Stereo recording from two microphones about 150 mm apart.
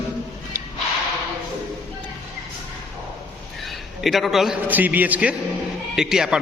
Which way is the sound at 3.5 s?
Centre (ahead or behind).